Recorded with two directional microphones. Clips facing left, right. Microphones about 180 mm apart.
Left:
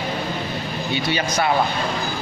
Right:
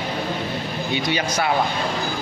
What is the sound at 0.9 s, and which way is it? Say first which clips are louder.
Speech: even; 15° right (ahead or behind).